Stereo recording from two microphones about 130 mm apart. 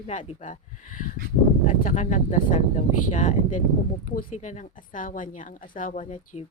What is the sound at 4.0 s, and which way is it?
A woman's voice, 90° left.